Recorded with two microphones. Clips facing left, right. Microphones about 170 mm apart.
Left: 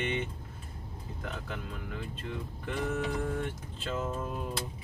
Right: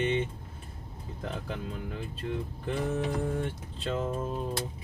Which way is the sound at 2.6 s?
30° right (ahead or behind).